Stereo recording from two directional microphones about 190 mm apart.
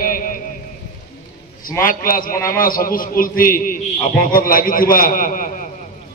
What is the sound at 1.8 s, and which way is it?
A man's voice, 50° left (ahead or behind).